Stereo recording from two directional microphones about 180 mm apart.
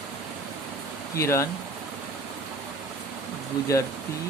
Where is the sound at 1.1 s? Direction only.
15° left (ahead or behind).